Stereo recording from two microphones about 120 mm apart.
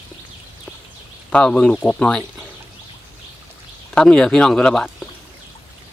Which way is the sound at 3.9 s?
5° left (ahead or behind).